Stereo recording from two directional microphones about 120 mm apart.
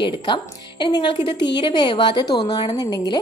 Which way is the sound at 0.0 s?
40° left (ahead or behind).